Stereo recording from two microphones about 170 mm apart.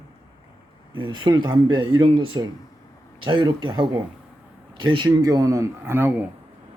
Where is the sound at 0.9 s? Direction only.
30° right (ahead or behind).